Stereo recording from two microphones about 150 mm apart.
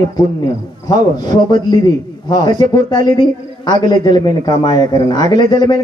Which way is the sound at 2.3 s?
25° left (ahead or behind).